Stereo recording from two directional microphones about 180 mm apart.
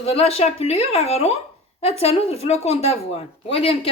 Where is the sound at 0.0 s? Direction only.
35° left (ahead or behind).